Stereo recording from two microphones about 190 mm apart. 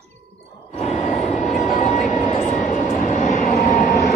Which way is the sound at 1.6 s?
35° left (ahead or behind).